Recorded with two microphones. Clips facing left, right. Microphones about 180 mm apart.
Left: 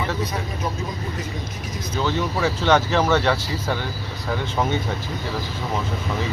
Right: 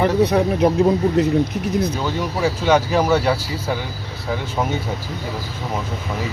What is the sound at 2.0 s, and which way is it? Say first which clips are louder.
Speech: right 1 dB; 10° right (ahead or behind).